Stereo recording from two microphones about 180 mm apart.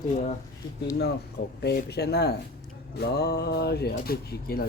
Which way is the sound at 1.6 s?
65° left (ahead or behind).